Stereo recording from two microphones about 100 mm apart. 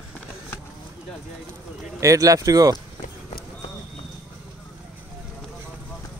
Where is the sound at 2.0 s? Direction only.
35° right (ahead or behind).